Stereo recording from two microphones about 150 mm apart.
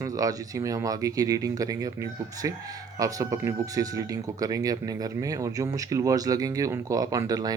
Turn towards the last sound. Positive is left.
turn(degrees=-25)  # may be behind; listen again after turning